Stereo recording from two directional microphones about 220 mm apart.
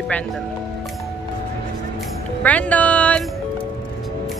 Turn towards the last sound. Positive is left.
turn(degrees=5)  # may be behind; listen again after turning